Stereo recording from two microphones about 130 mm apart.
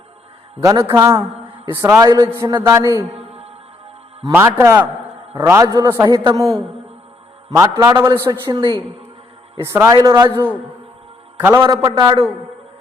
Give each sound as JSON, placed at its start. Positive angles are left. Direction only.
{"t": 0.6, "sound": "a man's voice", "side_deg": -25}
{"t": 2.0, "sound": "a man's voice", "side_deg": -30}
{"t": 4.3, "sound": "a man's voice", "side_deg": -20}
{"t": 7.5, "sound": "a man's voice", "side_deg": -30}
{"t": 9.6, "sound": "a man's voice", "side_deg": -15}
{"t": 10.0, "sound": "a man's voice", "side_deg": -35}
{"t": 11.5, "sound": "a man's voice", "side_deg": -30}